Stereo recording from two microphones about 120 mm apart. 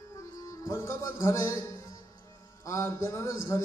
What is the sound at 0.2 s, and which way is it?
A man's voice, 30° left (ahead or behind).